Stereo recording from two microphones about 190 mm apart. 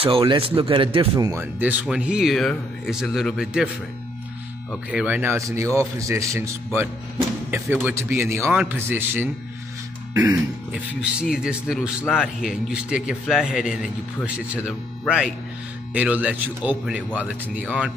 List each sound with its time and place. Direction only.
0.0 s speech: 30° right (ahead or behind)
1.3 s speech: 10° right (ahead or behind)
4.9 s a man's voice: 10° right (ahead or behind)
10.7 s a man's voice: 5° right (ahead or behind)